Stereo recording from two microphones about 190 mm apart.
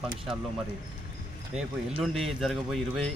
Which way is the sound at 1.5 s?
5° right (ahead or behind).